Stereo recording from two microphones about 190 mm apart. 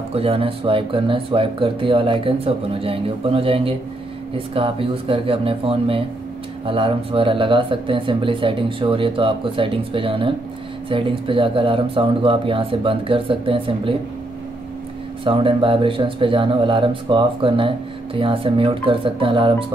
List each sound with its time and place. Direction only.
0.1 s speech: 30° right (ahead or behind)
15.2 s speech: 25° right (ahead or behind)